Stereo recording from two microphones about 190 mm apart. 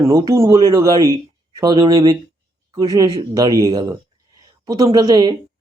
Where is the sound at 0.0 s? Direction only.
20° right (ahead or behind).